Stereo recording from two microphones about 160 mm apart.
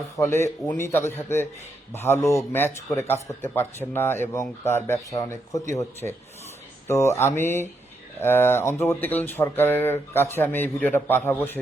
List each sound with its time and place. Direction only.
0.2 s a man's voice: 15° left (ahead or behind)